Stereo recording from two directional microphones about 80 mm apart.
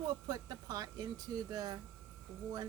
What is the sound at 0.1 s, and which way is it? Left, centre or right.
Speech, right.